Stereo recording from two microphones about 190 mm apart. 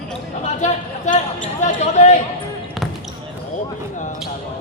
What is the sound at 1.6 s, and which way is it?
Speech, 35° left (ahead or behind).